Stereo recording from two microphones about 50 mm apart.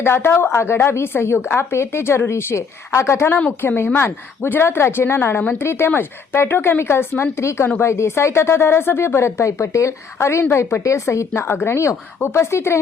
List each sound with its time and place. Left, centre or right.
0.0 s speech: left
3.6 s speech: left
10.8 s speech: left
11.4 s speech: left